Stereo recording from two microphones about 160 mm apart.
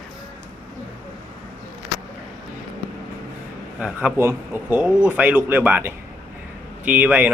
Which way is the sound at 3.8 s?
5° right (ahead or behind).